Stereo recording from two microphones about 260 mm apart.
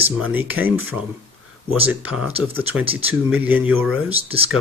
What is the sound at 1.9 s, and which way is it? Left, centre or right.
A man's voice, centre.